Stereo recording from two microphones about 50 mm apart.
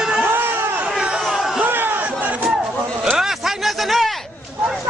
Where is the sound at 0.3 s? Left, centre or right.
Right.